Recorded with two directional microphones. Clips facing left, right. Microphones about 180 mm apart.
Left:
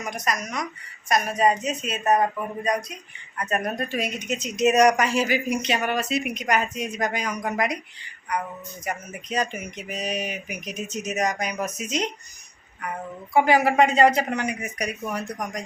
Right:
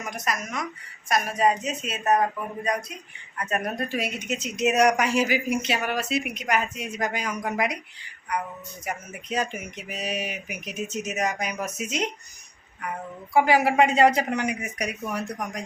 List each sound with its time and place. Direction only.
0.0 s speech: 5° right (ahead or behind)
3.9 s speech: 5° right (ahead or behind)
8.8 s speech: 5° right (ahead or behind)
13.3 s speech: 10° right (ahead or behind)